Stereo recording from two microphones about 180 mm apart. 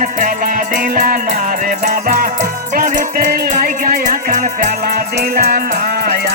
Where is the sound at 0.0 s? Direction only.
50° right (ahead or behind).